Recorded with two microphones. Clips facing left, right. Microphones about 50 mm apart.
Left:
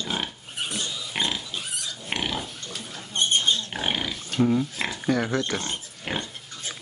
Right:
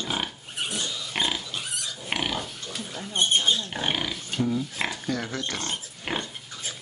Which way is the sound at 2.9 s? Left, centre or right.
Centre.